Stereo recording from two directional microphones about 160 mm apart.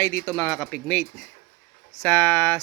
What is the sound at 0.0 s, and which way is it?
Speech, 15° left (ahead or behind).